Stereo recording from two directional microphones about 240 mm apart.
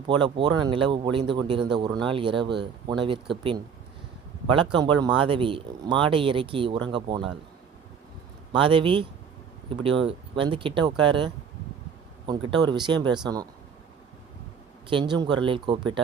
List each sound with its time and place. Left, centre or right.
0.1 s speech: centre
4.5 s speech: centre
8.5 s speech: right
14.8 s speech: centre